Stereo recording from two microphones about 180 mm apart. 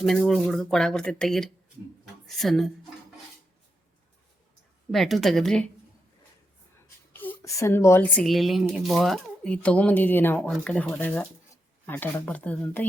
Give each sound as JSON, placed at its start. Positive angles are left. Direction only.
{"t": 0.0, "sound": "speech", "side_deg": 0}
{"t": 4.9, "sound": "speech", "side_deg": 0}
{"t": 7.1, "sound": "speech", "side_deg": 10}